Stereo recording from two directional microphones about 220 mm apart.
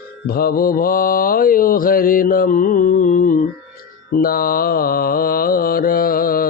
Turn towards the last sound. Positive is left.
turn(degrees=40)  # may be behind; listen again after turning